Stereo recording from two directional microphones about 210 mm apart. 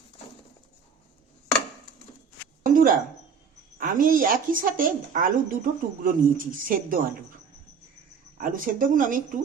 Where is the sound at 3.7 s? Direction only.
40° right (ahead or behind).